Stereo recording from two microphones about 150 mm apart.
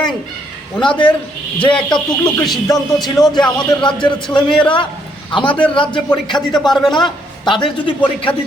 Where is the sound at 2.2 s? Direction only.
Centre (ahead or behind).